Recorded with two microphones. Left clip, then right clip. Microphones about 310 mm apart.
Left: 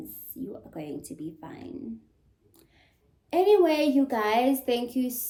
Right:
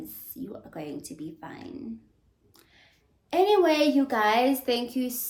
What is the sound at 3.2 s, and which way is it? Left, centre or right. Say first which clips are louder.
A woman's voice: even; centre.